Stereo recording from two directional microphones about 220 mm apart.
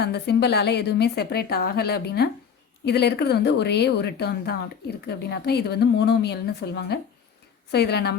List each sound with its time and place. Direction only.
0.0 s a woman's voice: 50° left (ahead or behind)